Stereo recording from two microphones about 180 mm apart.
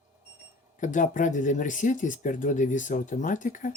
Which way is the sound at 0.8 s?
45° left (ahead or behind).